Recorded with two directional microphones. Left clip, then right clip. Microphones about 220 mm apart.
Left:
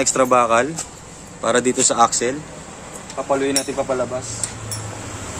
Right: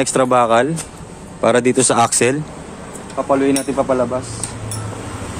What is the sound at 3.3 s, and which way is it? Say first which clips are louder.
Speech: right 4 dB; 25° right (ahead or behind).